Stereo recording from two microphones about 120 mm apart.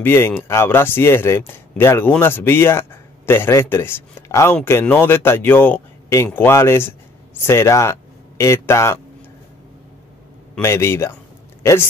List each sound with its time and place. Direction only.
0.0 s speech: 20° left (ahead or behind)
10.6 s speech: 20° left (ahead or behind)